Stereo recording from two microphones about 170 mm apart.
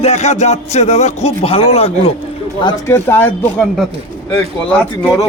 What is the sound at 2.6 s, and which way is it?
Speech, 25° left (ahead or behind).